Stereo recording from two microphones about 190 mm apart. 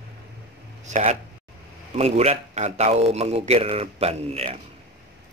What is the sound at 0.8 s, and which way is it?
A man's voice, 40° right (ahead or behind).